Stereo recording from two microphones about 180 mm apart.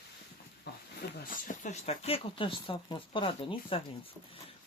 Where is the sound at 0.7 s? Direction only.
70° left (ahead or behind).